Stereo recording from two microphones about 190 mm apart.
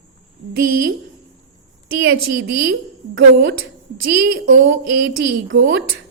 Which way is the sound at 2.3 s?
65° right (ahead or behind).